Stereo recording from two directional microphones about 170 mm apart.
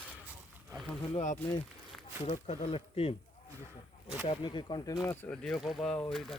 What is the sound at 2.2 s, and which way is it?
Speech, 35° left (ahead or behind).